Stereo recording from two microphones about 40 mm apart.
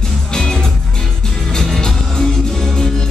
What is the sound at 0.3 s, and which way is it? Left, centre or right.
Music, centre.